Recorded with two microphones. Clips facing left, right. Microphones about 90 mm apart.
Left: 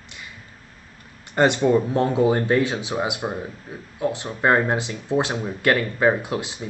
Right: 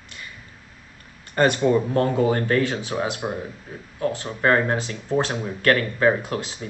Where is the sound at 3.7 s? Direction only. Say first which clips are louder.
Left 1 dB; 5° left (ahead or behind).